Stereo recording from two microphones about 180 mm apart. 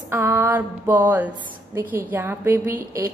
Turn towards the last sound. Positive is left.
turn(degrees=-15)  # may be behind; listen again after turning